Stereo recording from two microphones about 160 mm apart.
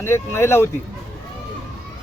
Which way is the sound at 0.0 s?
15° left (ahead or behind).